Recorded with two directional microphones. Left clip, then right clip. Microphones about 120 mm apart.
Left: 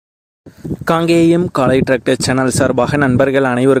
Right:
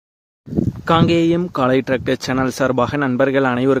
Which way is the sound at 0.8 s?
50° left (ahead or behind).